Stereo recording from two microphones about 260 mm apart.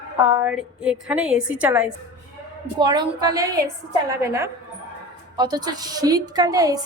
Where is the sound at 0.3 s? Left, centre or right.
Centre.